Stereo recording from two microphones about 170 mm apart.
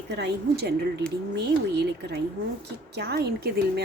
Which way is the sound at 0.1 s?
80° right.